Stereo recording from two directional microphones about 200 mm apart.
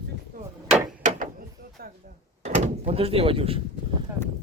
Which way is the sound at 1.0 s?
40° right (ahead or behind).